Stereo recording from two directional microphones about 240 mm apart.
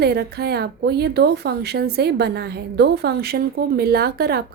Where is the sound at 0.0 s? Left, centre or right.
Right.